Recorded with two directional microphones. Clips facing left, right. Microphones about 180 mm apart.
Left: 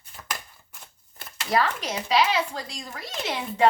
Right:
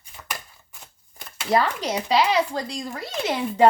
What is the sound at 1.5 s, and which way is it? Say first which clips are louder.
Speech: right 3 dB; 30° right (ahead or behind).